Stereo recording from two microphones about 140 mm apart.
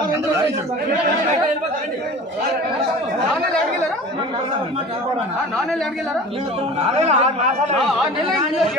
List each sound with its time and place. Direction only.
7.0 s speech: 50° right (ahead or behind)